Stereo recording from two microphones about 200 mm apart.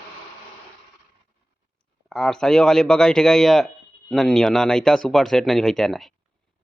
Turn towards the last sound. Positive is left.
turn(degrees=0)  # may be behind; listen again after turning